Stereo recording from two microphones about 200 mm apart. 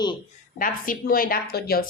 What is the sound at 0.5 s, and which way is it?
A woman's voice, 45° left (ahead or behind).